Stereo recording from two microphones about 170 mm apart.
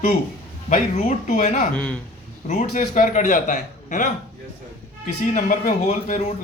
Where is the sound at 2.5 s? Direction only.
45° left (ahead or behind).